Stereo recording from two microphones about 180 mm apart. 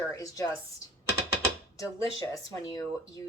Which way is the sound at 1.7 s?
20° left (ahead or behind).